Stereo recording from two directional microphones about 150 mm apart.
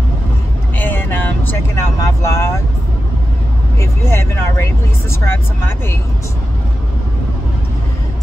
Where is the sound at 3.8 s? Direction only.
15° left (ahead or behind).